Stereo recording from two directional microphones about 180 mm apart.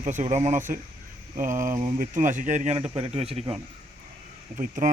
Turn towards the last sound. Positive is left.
turn(degrees=-45)  # may be behind; listen again after turning